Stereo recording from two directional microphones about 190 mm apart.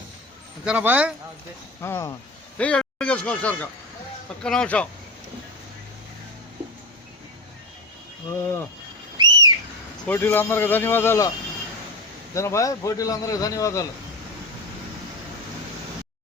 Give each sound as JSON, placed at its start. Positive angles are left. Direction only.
{"t": 0.6, "sound": "a man's voice", "side_deg": -5}
{"t": 1.8, "sound": "a man's voice", "side_deg": 15}
{"t": 8.4, "sound": "a man's voice", "side_deg": 15}
{"t": 9.1, "sound": "whistle", "side_deg": -20}
{"t": 10.1, "sound": "a man's voice", "side_deg": 10}
{"t": 12.3, "sound": "a man's voice", "side_deg": 15}